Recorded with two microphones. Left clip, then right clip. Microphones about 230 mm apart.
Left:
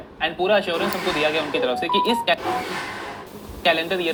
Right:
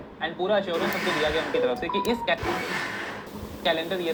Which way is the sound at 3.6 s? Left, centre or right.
Left.